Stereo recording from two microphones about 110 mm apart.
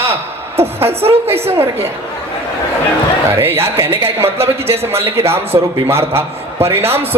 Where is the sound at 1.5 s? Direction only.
25° right (ahead or behind).